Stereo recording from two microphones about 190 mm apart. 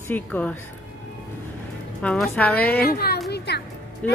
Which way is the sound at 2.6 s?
55° left (ahead or behind).